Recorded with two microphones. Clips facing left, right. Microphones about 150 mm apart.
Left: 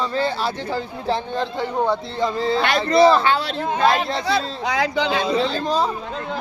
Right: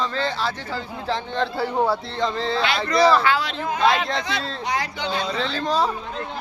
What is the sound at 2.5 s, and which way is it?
Speech, 45° left (ahead or behind).